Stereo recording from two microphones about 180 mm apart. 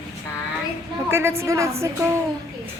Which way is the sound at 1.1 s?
15° right (ahead or behind).